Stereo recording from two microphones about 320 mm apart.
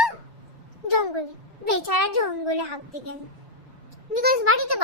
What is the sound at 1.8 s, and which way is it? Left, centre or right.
Speech, right.